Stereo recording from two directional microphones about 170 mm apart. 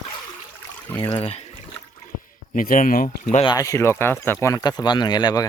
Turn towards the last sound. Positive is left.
turn(degrees=25)  # may be behind; listen again after turning